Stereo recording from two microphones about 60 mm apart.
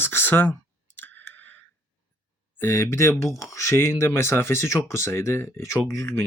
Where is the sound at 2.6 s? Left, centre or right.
Left.